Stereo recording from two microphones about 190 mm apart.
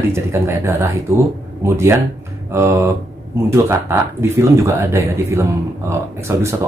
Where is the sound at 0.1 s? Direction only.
15° right (ahead or behind).